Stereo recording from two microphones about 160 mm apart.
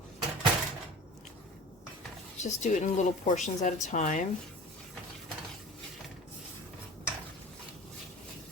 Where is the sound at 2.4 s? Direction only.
45° left (ahead or behind).